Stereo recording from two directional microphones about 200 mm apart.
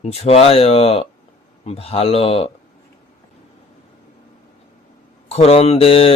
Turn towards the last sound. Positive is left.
turn(degrees=30)  # may be behind; listen again after turning